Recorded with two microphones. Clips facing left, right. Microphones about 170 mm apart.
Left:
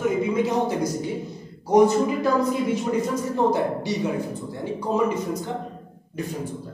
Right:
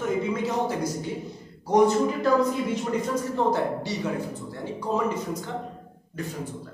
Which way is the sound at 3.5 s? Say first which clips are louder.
Left 3 dB; 15° left (ahead or behind).